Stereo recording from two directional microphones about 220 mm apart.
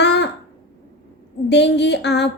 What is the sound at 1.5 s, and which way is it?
Speech, 50° left (ahead or behind).